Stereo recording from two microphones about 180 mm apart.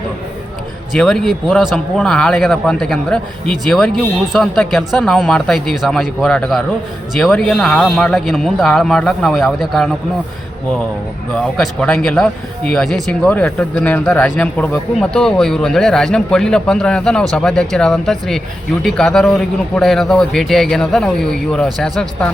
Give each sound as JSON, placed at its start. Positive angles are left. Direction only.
{"t": 0.9, "sound": "speech", "side_deg": 5}
{"t": 11.3, "sound": "speech", "side_deg": 5}